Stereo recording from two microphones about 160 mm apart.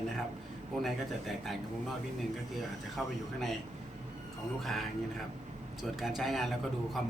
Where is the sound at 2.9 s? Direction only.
Centre (ahead or behind).